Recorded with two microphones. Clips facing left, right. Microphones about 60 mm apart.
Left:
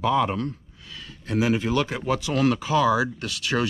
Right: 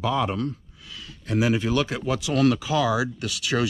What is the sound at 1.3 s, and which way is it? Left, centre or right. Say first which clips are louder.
Speech: even; centre.